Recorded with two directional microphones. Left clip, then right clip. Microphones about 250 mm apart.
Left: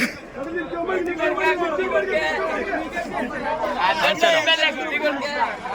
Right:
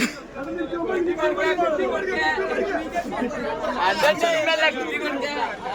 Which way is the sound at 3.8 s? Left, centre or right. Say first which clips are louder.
Left 1 dB; centre.